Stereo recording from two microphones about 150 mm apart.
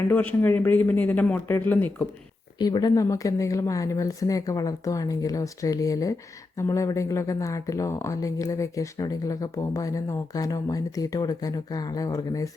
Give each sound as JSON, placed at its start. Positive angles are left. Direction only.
{"t": 0.1, "sound": "speech", "side_deg": 10}
{"t": 2.6, "sound": "speech", "side_deg": 25}